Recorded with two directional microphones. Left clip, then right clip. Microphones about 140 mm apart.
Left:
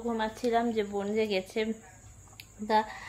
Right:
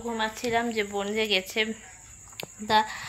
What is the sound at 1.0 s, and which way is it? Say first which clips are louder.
Speech: right 6 dB; 15° left (ahead or behind).